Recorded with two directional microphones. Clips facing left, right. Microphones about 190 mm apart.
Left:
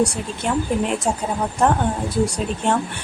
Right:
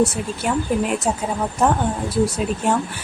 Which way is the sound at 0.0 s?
5° right (ahead or behind).